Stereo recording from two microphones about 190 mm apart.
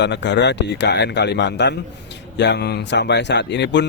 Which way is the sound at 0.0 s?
65° left (ahead or behind).